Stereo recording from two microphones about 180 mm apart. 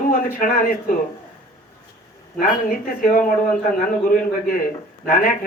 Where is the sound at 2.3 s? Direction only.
50° left (ahead or behind).